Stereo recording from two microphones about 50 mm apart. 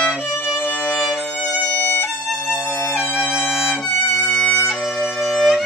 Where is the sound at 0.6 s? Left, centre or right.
Left.